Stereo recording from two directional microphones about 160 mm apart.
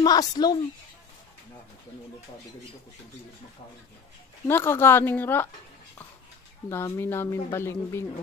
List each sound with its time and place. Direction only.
0.0 s a woman's voice: 25° left (ahead or behind)
4.5 s speech: 15° left (ahead or behind)
6.7 s speech: 15° left (ahead or behind)